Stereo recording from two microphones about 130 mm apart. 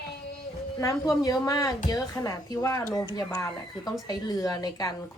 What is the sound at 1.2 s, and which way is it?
A woman's voice, 25° left (ahead or behind).